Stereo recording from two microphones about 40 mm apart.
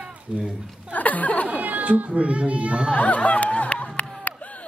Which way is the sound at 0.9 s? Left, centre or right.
Left.